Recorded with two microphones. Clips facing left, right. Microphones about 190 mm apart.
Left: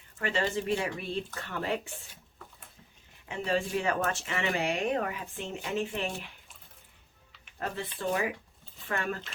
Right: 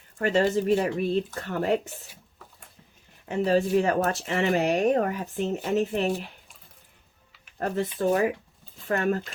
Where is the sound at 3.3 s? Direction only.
40° right (ahead or behind).